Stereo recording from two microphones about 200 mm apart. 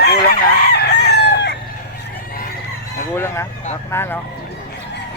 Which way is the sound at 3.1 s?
10° left (ahead or behind).